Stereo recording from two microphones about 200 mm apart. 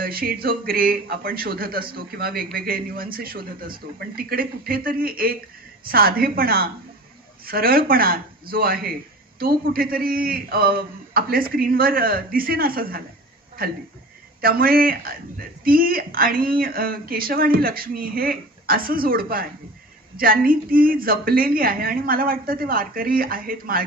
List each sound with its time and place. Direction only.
0.0 s speech: 45° right (ahead or behind)
14.4 s speech: 45° right (ahead or behind)